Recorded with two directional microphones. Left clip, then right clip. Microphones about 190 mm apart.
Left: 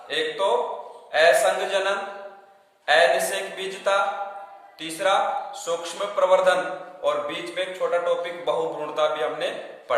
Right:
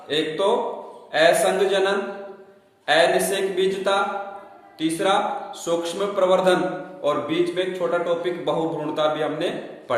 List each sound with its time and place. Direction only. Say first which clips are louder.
0.1 s a man's voice: right 2 dB; 15° right (ahead or behind)